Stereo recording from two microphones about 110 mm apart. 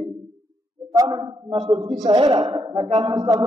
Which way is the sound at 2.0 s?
40° right (ahead or behind).